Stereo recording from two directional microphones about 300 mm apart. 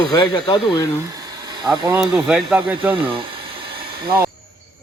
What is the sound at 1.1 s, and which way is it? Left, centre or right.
Speech, centre.